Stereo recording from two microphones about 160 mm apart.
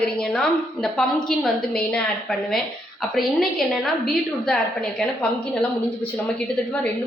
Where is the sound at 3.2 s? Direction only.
Centre (ahead or behind).